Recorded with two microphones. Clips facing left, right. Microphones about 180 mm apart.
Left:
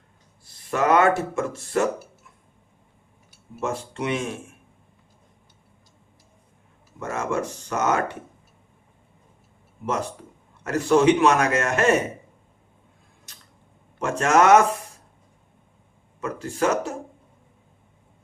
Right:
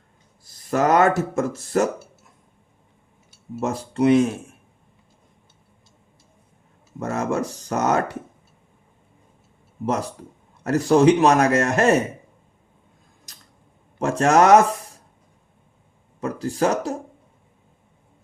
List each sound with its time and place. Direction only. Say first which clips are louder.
0.4 s speech: right 2 dB; 40° right (ahead or behind)
3.6 s speech: right 7 dB; 40° right (ahead or behind)
7.0 s speech: right 3 dB; 40° right (ahead or behind)
9.8 s speech: right 3 dB; 35° right (ahead or behind)
13.3 s a sound: even; 40° right (ahead or behind)
14.0 s speech: right 2 dB; 35° right (ahead or behind)
16.2 s speech: right 2 dB; 35° right (ahead or behind)